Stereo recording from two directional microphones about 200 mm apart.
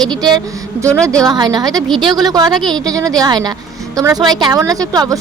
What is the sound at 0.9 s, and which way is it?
Speech, 5° left (ahead or behind).